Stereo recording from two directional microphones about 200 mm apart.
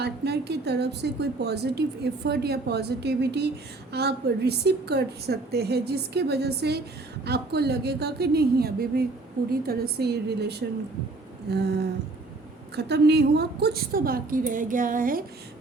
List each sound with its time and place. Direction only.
0.0 s a woman's voice: 55° right (ahead or behind)